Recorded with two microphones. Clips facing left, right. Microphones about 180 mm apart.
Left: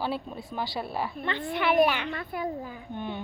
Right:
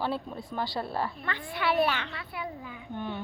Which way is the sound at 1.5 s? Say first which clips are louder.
Left 4 dB; 20° left (ahead or behind).